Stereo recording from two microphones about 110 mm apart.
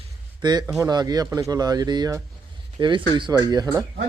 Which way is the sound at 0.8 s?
35° right (ahead or behind).